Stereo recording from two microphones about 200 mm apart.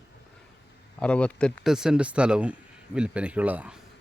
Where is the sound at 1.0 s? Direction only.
5° left (ahead or behind).